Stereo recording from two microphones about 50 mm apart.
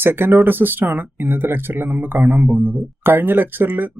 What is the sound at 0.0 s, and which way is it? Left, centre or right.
Speech, right.